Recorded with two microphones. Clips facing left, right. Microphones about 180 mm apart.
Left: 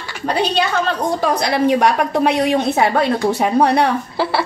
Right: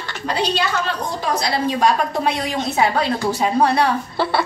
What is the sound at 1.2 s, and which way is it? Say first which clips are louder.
A woman's voice: left 3 dB; 55° left (ahead or behind).